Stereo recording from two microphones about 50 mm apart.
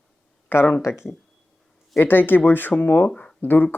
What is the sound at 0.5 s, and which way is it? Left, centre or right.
Speech, left.